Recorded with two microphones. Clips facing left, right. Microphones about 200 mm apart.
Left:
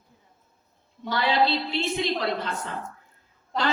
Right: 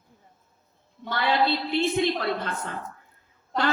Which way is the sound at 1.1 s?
55° right (ahead or behind).